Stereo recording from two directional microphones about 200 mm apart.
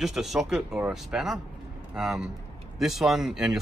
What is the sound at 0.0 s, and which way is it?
Speech, centre (ahead or behind).